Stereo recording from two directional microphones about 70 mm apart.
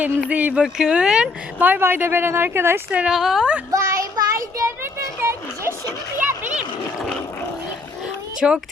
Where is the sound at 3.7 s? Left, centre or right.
Right.